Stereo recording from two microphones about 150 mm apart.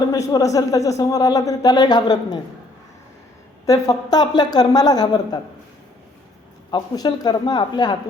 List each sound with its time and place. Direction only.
0.1 s a man's voice: 25° left (ahead or behind)
3.7 s a man's voice: 25° left (ahead or behind)
6.7 s a man's voice: 30° left (ahead or behind)